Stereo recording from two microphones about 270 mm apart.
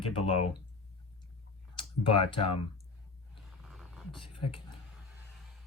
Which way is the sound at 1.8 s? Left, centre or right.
Centre.